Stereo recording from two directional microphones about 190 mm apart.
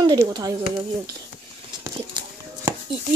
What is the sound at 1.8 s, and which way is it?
Horse, 15° right (ahead or behind).